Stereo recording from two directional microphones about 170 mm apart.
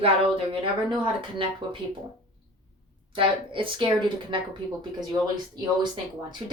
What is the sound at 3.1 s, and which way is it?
A woman's voice, 30° right (ahead or behind).